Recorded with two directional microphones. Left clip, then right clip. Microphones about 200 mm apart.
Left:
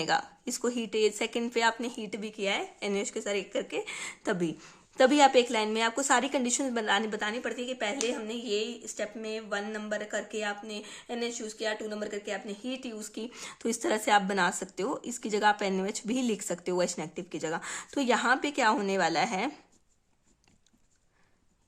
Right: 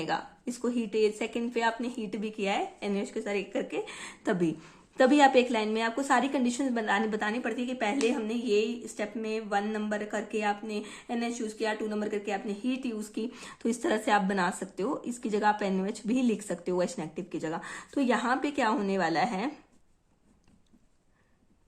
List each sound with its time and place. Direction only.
0.0 s speech: 35° left (ahead or behind)